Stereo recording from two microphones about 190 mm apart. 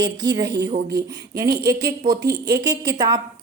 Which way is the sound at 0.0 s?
20° right (ahead or behind).